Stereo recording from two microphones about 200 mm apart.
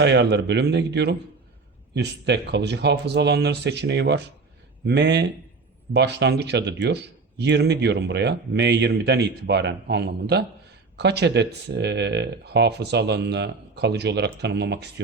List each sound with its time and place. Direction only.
0.0 s speech: 60° right (ahead or behind)